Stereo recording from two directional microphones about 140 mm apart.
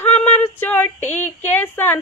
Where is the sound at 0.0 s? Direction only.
15° left (ahead or behind).